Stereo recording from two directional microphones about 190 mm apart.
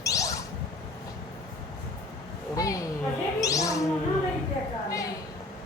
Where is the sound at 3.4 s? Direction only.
15° left (ahead or behind).